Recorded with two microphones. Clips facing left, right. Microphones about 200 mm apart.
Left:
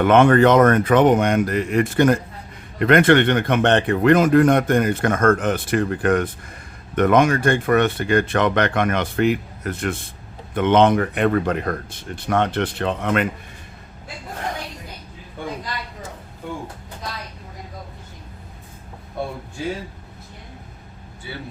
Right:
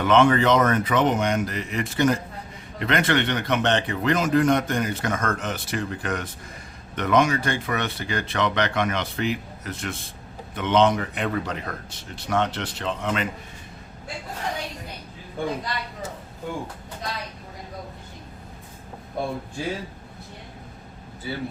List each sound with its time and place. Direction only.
0.0 s a man's voice: 55° left (ahead or behind)